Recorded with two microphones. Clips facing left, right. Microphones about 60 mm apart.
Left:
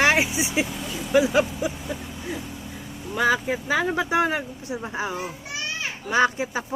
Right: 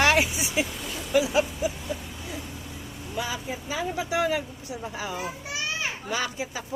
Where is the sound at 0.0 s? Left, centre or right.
Left.